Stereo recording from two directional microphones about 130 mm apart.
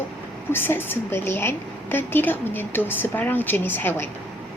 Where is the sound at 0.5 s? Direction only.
15° left (ahead or behind).